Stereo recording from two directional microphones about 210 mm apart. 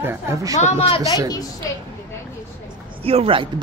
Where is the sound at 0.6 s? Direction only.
30° left (ahead or behind).